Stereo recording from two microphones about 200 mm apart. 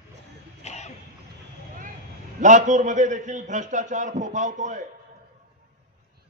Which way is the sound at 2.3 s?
40° right (ahead or behind).